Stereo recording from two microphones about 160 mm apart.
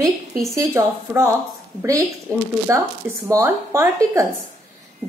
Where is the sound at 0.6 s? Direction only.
20° right (ahead or behind).